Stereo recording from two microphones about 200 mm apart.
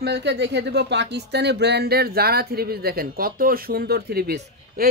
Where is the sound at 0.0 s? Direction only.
60° right (ahead or behind).